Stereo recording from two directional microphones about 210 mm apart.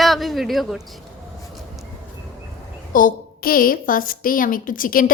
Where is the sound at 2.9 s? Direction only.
40° left (ahead or behind).